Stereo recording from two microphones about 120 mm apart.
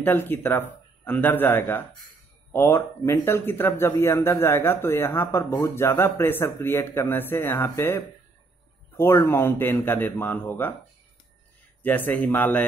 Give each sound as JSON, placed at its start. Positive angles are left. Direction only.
{"t": 0.0, "sound": "a man's voice", "side_deg": 15}
{"t": 11.8, "sound": "a man's voice", "side_deg": 15}